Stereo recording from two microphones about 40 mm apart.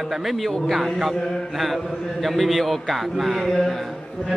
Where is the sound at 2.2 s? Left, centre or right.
Centre.